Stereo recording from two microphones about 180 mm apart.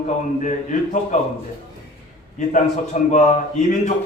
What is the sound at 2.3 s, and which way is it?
Speech, 40° left (ahead or behind).